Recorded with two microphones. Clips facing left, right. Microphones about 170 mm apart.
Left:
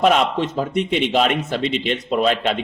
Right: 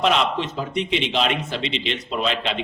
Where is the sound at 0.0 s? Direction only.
45° left (ahead or behind).